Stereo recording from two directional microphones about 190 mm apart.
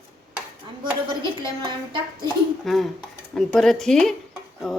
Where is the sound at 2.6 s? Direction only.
Centre (ahead or behind).